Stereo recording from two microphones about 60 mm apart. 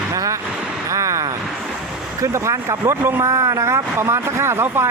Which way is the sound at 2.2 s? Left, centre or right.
Right.